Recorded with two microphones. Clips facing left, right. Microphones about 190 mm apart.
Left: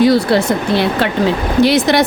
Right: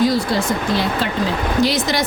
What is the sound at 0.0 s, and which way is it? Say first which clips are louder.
A woman's voice: left 6 dB; 70° left (ahead or behind).